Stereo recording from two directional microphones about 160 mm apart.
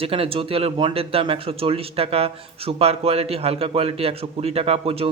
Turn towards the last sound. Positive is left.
turn(degrees=-40)  # may be behind; listen again after turning